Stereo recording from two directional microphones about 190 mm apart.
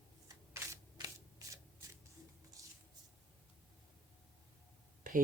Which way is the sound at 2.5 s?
20° right (ahead or behind).